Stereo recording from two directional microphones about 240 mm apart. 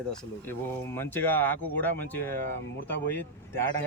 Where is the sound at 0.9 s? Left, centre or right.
Centre.